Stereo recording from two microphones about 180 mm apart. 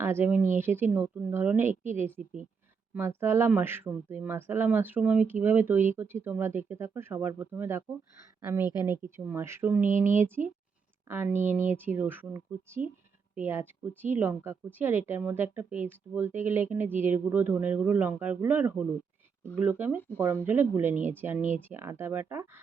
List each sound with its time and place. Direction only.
0.0 s speech: 10° right (ahead or behind)
8.9 s speech: 15° right (ahead or behind)
11.1 s speech: 15° right (ahead or behind)